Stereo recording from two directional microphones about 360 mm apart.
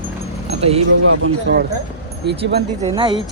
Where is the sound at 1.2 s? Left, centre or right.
Right.